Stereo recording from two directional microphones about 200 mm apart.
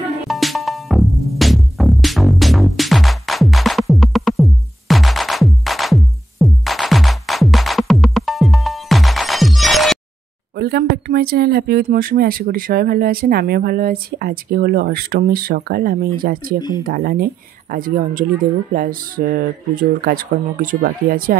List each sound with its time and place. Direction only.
0.3 s music: centre (ahead or behind)
10.6 s speech: 50° right (ahead or behind)